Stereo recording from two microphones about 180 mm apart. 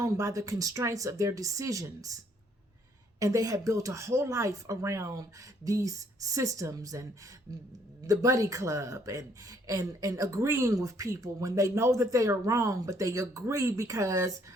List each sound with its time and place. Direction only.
0.0 s speech: 15° right (ahead or behind)
3.2 s speech: 20° right (ahead or behind)